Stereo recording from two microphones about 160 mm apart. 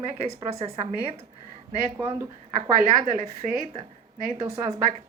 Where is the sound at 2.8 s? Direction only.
55° right (ahead or behind).